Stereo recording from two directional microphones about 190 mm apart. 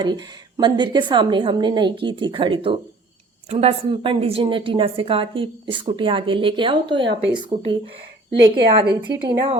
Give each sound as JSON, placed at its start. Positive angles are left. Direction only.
{"t": 0.0, "sound": "a woman's voice", "side_deg": -25}
{"t": 9.0, "sound": "a woman's voice", "side_deg": -25}